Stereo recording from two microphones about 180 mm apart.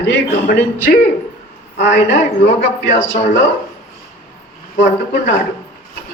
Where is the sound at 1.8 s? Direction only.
90° left.